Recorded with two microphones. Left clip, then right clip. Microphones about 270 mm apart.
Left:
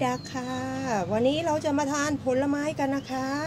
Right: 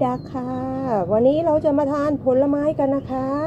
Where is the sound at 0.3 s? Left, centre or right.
Left.